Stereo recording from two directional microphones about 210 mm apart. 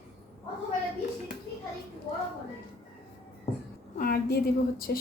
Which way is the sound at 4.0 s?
45° left (ahead or behind).